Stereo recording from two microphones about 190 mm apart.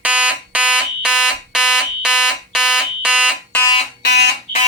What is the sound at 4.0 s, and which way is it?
Alarm, 60° left (ahead or behind).